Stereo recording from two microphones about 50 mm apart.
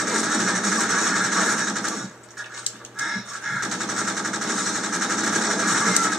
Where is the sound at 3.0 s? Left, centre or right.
Centre.